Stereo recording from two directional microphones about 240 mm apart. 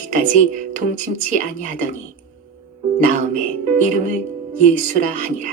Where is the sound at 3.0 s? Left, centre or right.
Right.